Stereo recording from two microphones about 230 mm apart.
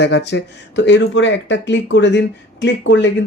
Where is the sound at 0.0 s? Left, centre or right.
Left.